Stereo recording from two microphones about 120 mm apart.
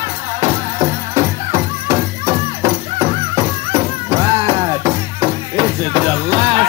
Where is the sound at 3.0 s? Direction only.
35° right (ahead or behind).